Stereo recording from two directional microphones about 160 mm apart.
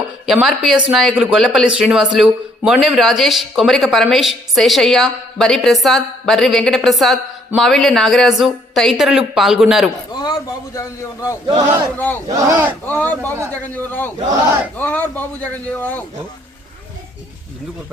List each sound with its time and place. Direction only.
0.3 s speech: 5° right (ahead or behind)
10.1 s a sound: 25° left (ahead or behind)
10.8 s a man's voice: 20° left (ahead or behind)
12.3 s speech: 20° right (ahead or behind)
12.8 s speech: 10° left (ahead or behind)
13.3 s a man's voice: 20° right (ahead or behind)
13.6 s speech: 10° left (ahead or behind)